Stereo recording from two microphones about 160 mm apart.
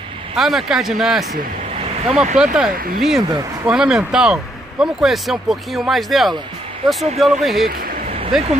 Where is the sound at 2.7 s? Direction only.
65° right (ahead or behind).